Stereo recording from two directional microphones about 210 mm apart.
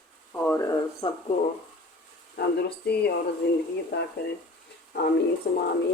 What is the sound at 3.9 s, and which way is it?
Speech, 55° left (ahead or behind).